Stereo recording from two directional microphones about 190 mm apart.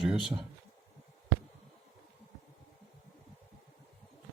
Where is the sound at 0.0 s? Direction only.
Centre (ahead or behind).